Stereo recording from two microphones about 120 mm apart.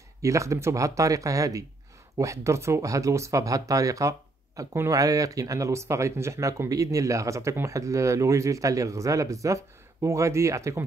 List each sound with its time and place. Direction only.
0.2 s speech: 25° right (ahead or behind)